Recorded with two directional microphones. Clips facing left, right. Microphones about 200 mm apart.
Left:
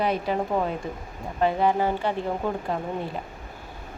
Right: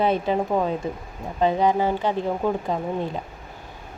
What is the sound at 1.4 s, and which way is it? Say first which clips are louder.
Speech: right 2 dB; 15° right (ahead or behind).